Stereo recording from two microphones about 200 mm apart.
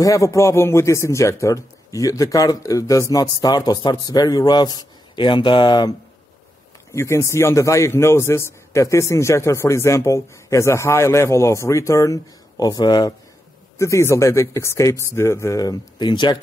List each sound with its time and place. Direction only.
0.0 s a man's voice: 15° left (ahead or behind)